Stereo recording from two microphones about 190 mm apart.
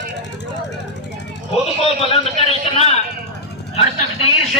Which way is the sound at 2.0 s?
30° left (ahead or behind).